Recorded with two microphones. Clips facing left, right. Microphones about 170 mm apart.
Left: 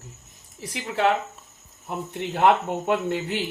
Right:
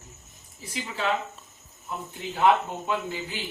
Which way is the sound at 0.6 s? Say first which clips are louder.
Left 6 dB; 70° left (ahead or behind).